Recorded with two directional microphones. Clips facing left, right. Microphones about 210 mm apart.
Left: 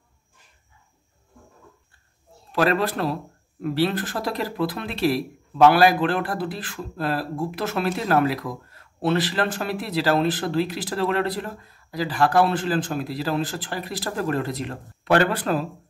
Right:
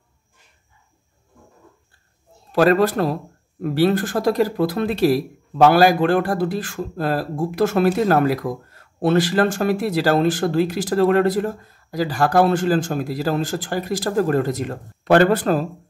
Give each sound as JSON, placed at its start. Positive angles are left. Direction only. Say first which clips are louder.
{"t": 2.5, "sound": "speech", "louder": "right 6 dB", "side_deg": -45}